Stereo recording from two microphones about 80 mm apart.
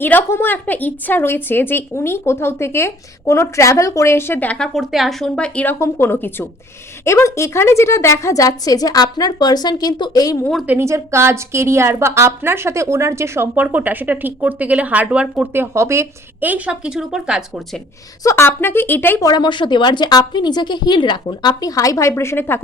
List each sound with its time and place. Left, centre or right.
0.0 s a woman's voice: left
4.4 s a woman's voice: centre
4.8 s a woman's voice: centre
5.2 s a woman's voice: centre
5.8 s a woman's voice: left
10.8 s a woman's voice: right; by 15.4 s centre
15.5 s a woman's voice: right
16.4 s a woman's voice: centre
18.3 s speech: left
19.2 s a woman's voice: left